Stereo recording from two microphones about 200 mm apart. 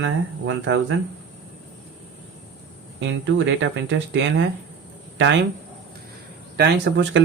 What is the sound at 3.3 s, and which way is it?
Speech, 65° right (ahead or behind).